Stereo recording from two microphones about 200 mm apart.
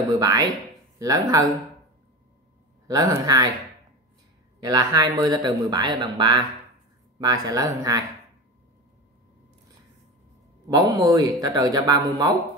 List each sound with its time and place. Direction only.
0.1 s speech: 20° right (ahead or behind)
2.9 s speech: 15° right (ahead or behind)
4.6 s speech: 15° right (ahead or behind)
10.7 s speech: 20° right (ahead or behind)